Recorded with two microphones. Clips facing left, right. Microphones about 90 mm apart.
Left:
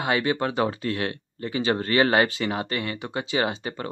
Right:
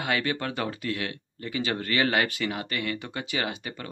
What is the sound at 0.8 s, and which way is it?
Speech, 35° left (ahead or behind).